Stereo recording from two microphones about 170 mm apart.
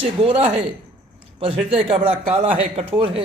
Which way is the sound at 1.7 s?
30° right (ahead or behind).